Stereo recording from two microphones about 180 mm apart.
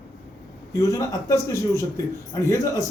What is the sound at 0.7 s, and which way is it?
A man's voice, 15° left (ahead or behind).